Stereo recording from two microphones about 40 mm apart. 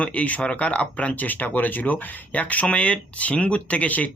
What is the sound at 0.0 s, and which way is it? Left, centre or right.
A man's voice, left.